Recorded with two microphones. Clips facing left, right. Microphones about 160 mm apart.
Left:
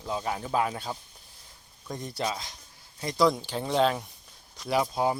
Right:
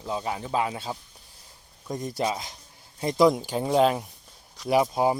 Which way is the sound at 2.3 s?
25° right (ahead or behind).